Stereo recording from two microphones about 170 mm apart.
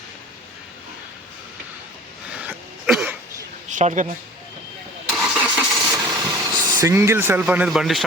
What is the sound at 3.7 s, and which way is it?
Speech, 45° right (ahead or behind).